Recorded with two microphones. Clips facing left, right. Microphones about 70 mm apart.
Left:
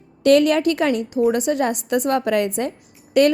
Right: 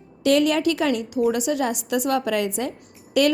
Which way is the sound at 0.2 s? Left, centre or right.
Left.